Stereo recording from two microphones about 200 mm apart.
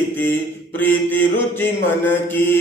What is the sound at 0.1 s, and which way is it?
Mantra, 10° left (ahead or behind).